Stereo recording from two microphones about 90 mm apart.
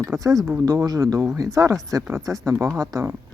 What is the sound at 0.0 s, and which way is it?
Speech, 35° right (ahead or behind).